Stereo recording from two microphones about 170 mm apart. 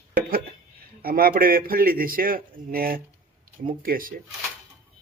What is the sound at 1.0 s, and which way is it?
A man's voice, 60° right (ahead or behind).